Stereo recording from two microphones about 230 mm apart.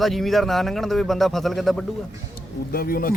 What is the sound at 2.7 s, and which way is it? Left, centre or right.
Speech, left.